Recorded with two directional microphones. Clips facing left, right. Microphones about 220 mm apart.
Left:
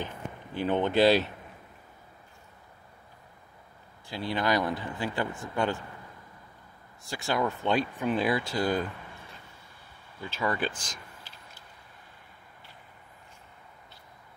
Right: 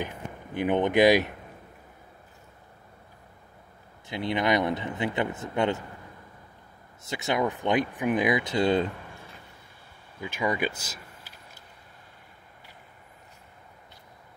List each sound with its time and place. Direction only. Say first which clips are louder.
0.6 s speech: right 3 dB; 15° right (ahead or behind)
4.1 s speech: right 3 dB; 20° right (ahead or behind)
7.1 s speech: right 2 dB; 20° right (ahead or behind)
10.2 s speech: right 2 dB; 15° right (ahead or behind)